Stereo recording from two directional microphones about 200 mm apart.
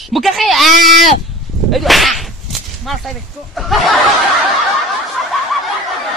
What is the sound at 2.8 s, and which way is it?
Speech, centre (ahead or behind).